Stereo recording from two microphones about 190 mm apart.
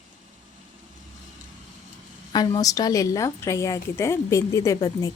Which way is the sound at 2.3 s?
20° left (ahead or behind).